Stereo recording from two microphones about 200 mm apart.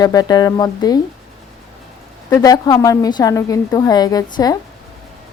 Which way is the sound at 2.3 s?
15° left (ahead or behind).